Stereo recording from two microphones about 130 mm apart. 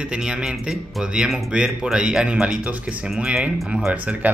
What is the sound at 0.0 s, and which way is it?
Speech, 5° right (ahead or behind).